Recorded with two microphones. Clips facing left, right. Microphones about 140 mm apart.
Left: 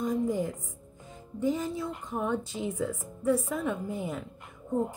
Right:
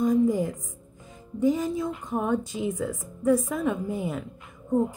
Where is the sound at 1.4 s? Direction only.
10° right (ahead or behind).